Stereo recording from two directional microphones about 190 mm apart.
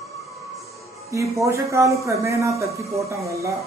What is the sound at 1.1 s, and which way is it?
A man's voice, 15° right (ahead or behind).